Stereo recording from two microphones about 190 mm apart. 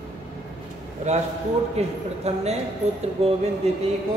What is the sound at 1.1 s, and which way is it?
A man's voice, 35° right (ahead or behind).